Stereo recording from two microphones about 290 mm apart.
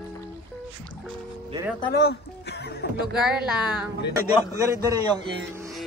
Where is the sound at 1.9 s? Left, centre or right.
Left.